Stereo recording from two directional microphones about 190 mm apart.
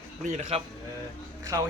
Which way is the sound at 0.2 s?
40° right (ahead or behind).